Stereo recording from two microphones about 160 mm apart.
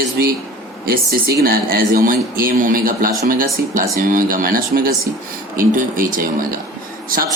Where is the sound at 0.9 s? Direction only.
75° right (ahead or behind).